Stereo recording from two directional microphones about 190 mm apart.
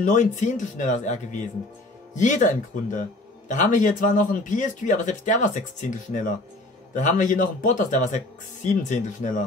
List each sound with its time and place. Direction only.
0.0 s speech: 40° left (ahead or behind)